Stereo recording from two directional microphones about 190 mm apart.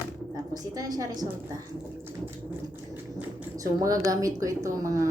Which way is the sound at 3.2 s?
20° right (ahead or behind).